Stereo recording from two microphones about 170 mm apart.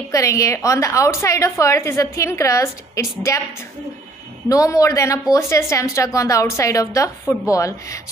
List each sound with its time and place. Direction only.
0.1 s a woman's voice: 20° left (ahead or behind)
4.5 s a woman's voice: 20° left (ahead or behind)